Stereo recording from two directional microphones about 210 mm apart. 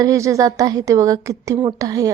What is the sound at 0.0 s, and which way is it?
A woman's voice, 15° right (ahead or behind).